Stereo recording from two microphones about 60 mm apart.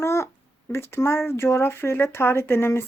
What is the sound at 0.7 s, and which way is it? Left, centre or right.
Speech, left.